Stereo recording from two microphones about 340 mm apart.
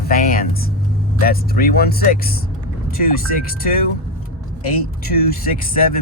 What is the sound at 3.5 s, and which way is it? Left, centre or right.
Speech, left.